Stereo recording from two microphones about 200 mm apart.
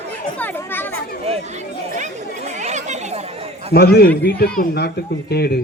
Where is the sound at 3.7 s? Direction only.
50° left (ahead or behind).